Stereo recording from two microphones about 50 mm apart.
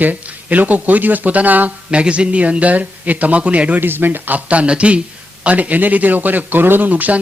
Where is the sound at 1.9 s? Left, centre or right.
Right.